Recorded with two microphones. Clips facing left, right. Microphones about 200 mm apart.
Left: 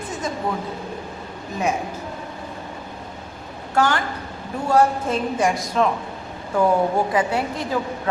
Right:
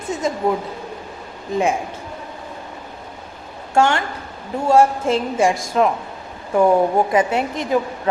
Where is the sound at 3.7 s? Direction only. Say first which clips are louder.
Right 3 dB; 25° right (ahead or behind).